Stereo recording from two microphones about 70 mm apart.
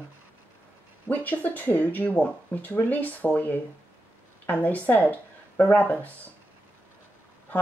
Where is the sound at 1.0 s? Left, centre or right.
Left.